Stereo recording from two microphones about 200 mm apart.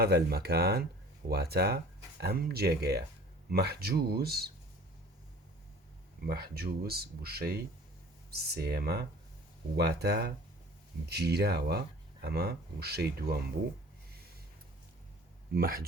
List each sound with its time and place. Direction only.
0.0 s speech: 50° right (ahead or behind)
6.2 s speech: 50° right (ahead or behind)
15.5 s speech: 45° right (ahead or behind)